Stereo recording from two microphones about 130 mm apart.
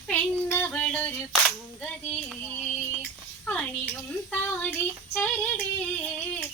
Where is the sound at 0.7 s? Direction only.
10° left (ahead or behind).